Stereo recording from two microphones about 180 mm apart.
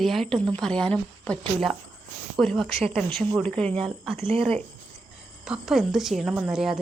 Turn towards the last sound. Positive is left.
turn(degrees=-5)  # may be behind; listen again after turning